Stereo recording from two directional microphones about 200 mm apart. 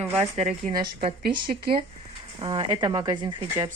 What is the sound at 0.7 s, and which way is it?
Speech, 25° right (ahead or behind).